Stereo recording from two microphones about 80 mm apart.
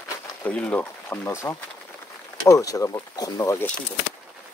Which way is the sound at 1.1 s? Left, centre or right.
Left.